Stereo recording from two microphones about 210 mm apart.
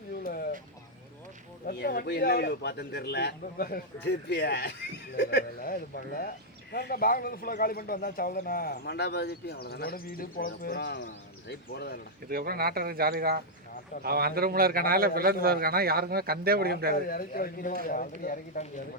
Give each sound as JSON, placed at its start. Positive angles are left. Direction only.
{"t": 0.3, "sound": "a sound", "side_deg": 45}
{"t": 1.6, "sound": "speech", "side_deg": 50}
{"t": 12.3, "sound": "a man's voice", "side_deg": -45}
{"t": 17.1, "sound": "speech", "side_deg": 45}